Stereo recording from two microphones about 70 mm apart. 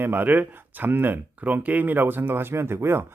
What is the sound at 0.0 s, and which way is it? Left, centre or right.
Speech, right.